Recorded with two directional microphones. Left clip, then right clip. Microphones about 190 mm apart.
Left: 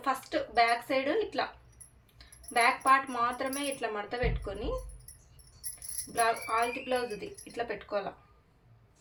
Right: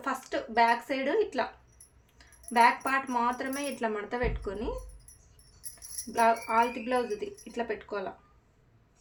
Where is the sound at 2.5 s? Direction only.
35° right (ahead or behind).